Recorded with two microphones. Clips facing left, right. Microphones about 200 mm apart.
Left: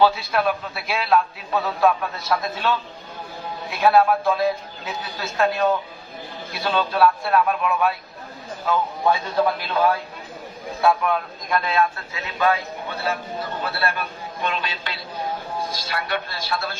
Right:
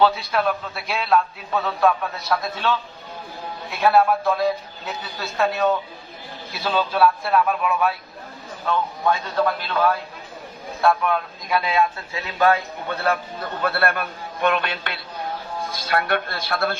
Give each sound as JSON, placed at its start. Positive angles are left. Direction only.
{"t": 0.0, "sound": "a man's voice", "side_deg": 0}
{"t": 12.1, "sound": "speech", "side_deg": -40}
{"t": 13.7, "sound": "a man's voice", "side_deg": -55}